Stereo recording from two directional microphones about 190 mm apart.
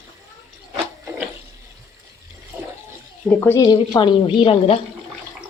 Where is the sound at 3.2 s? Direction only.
10° left (ahead or behind); by 4.8 s 30° left (ahead or behind).